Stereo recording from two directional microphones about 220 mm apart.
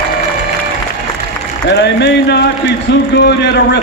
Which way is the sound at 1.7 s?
50° left (ahead or behind).